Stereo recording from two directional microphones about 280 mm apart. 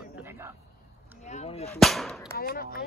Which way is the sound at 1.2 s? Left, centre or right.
Left.